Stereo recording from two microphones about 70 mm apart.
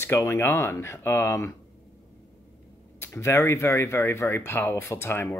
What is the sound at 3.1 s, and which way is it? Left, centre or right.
A man's voice, left.